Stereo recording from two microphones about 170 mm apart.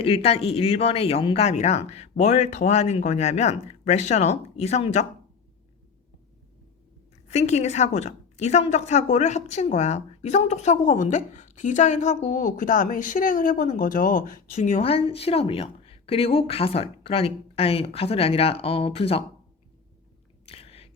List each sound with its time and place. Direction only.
0.0 s speech: 35° left (ahead or behind)
7.3 s a woman's voice: 40° left (ahead or behind)
14.5 s speech: 40° left (ahead or behind)
20.4 s whispering: 35° left (ahead or behind)